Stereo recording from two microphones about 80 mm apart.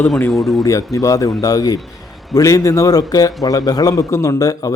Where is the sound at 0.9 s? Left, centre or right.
Left.